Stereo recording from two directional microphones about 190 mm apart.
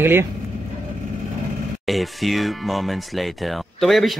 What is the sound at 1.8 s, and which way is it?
Speech, centre (ahead or behind).